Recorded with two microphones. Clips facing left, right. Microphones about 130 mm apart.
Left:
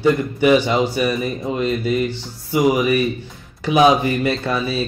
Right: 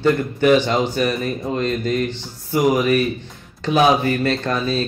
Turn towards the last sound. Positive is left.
turn(degrees=10)  # may be behind; listen again after turning